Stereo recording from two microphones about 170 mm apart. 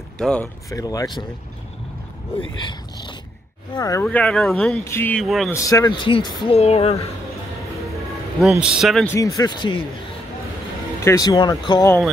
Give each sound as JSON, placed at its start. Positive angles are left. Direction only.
{"t": 0.2, "sound": "speech", "side_deg": 5}
{"t": 0.7, "sound": "speech", "side_deg": 20}
{"t": 2.5, "sound": "speech", "side_deg": 25}
{"t": 5.2, "sound": "speech", "side_deg": 0}
{"t": 5.5, "sound": "speech", "side_deg": 20}
{"t": 8.4, "sound": "speech", "side_deg": -5}
{"t": 9.0, "sound": "speech", "side_deg": 20}
{"t": 11.0, "sound": "speech", "side_deg": 20}